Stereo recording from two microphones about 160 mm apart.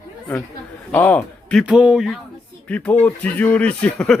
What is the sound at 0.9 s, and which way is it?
Speech, 10° left (ahead or behind).